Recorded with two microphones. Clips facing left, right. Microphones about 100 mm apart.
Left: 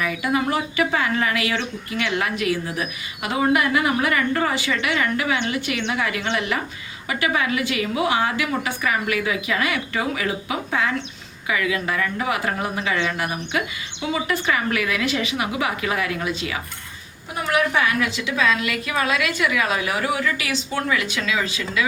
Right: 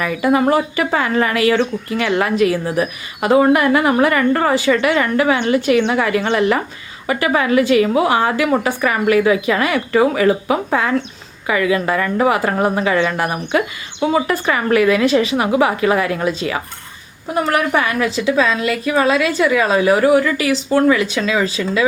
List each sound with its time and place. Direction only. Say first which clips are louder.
0.0 s a woman's voice: right 7 dB; 45° right (ahead or behind)
17.7 s a woman's voice: right 4 dB; 40° right (ahead or behind)